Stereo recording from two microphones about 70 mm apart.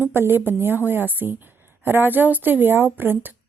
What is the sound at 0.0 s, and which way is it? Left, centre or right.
Speech, right.